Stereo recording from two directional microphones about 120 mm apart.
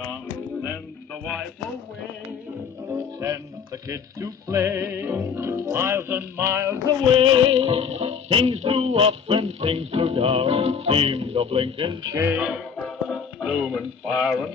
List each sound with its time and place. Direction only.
2.9 s music: 25° right (ahead or behind)
7.1 s music: 50° right (ahead or behind)
12.1 s music: 20° right (ahead or behind)
12.4 s speech: 5° right (ahead or behind)
12.7 s music: 5° left (ahead or behind)
13.7 s speech: 5° left (ahead or behind)